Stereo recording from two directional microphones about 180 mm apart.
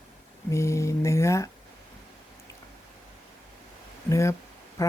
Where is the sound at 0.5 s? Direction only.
15° left (ahead or behind).